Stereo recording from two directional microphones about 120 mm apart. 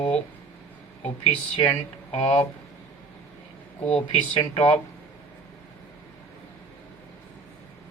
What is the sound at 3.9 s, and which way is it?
Speech, 55° left (ahead or behind).